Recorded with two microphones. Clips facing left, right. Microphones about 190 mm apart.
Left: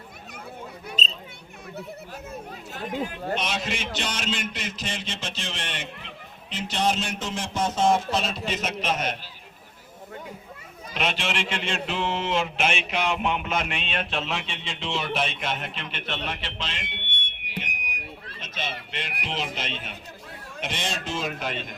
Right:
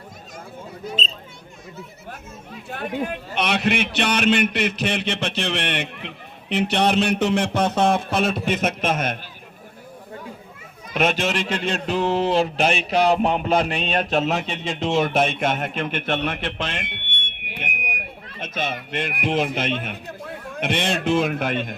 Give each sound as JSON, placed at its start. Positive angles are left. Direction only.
{"t": 2.6, "sound": "speech", "side_deg": -60}
{"t": 10.9, "sound": "mantra", "side_deg": -45}
{"t": 19.2, "sound": "speech", "side_deg": -55}